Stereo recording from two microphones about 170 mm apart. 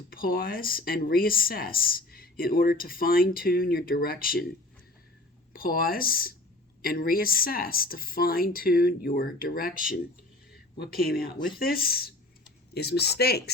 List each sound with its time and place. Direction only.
0.1 s speech: 60° left (ahead or behind)
5.5 s speech: 60° left (ahead or behind)